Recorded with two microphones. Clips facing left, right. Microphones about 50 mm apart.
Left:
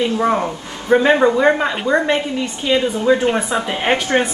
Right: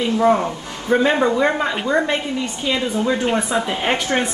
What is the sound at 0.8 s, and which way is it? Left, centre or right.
Speech, left.